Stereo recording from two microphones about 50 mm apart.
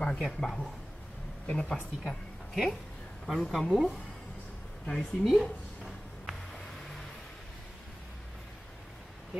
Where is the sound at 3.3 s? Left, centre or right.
Centre.